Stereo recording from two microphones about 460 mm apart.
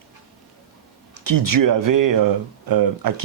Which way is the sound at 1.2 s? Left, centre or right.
Right.